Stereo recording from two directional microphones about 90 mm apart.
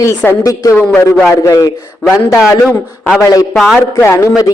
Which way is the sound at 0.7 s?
15° left (ahead or behind).